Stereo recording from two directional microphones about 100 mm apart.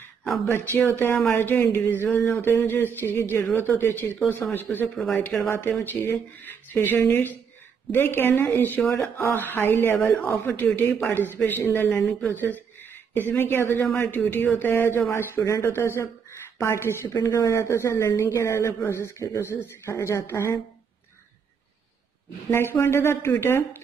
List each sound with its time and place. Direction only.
0.7 s a woman's voice: 20° left (ahead or behind)
4.9 s speech: 5° left (ahead or behind)
5.5 s a woman's voice: 20° left (ahead or behind)
22.5 s a woman's voice: 25° left (ahead or behind)